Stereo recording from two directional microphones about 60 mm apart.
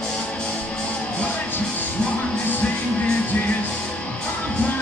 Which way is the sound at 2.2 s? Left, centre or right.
Left.